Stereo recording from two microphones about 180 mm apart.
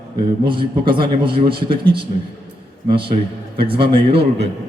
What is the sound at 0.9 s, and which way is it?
Speech, 30° right (ahead or behind).